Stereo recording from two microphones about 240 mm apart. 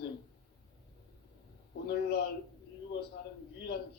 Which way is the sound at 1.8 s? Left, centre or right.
Left.